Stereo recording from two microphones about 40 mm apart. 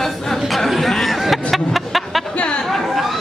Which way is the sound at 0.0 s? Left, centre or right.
Centre.